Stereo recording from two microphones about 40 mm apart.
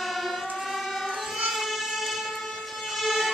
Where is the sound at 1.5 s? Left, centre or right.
Centre.